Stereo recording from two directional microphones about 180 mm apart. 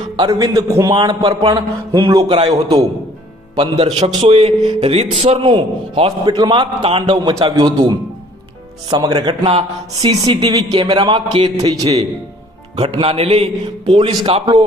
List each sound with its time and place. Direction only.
0.2 s a man's voice: 20° right (ahead or behind)
13.0 s a man's voice: 35° right (ahead or behind)